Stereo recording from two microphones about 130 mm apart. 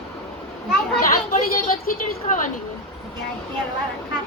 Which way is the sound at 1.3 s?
90° left.